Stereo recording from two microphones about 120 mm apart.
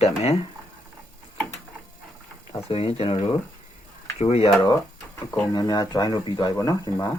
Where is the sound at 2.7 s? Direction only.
55° left (ahead or behind).